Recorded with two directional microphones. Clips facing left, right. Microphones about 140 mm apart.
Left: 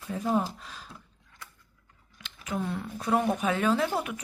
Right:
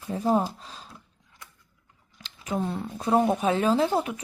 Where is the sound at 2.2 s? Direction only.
35° right (ahead or behind).